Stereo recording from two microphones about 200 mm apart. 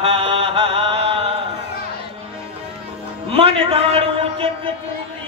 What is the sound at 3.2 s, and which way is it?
Music, 30° right (ahead or behind).